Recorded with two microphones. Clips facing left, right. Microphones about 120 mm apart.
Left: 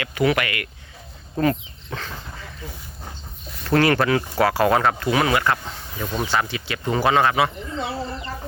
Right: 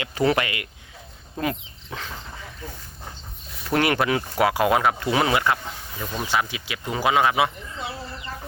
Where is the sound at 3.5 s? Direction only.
10° right (ahead or behind).